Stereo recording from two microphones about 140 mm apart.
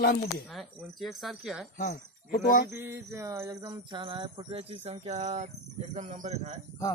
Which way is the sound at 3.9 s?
35° right (ahead or behind).